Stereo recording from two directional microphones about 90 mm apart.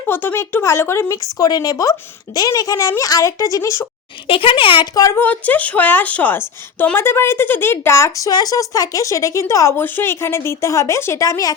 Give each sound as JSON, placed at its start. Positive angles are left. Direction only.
{"t": 0.1, "sound": "speech", "side_deg": 25}
{"t": 4.3, "sound": "speech", "side_deg": 80}
{"t": 5.1, "sound": "a woman's voice", "side_deg": 20}
{"t": 9.8, "sound": "speech", "side_deg": 25}